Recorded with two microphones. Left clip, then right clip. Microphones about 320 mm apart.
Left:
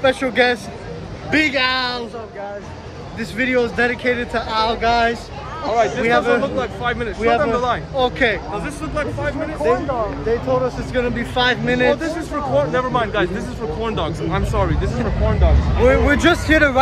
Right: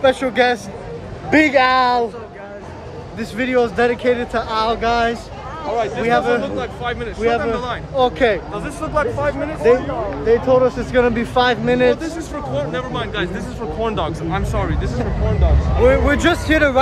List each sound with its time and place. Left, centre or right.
0.0 s speech: centre
1.3 s speech: centre
3.2 s speech: centre
5.8 s speech: centre
6.0 s speech: centre
6.4 s speech: centre
7.2 s speech: centre
7.5 s speech: centre
7.9 s speech: centre
9.6 s speech: right; by 11.9 s centre
12.5 s speech: centre
13.8 s speech: centre
15.8 s speech: centre